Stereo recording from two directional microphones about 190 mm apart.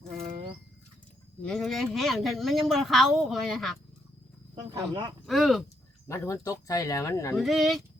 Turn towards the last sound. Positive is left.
turn(degrees=0)  # may be behind; listen again after turning